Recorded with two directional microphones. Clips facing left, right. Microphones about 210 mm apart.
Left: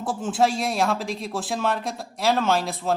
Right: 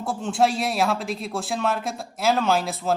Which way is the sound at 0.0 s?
Centre (ahead or behind).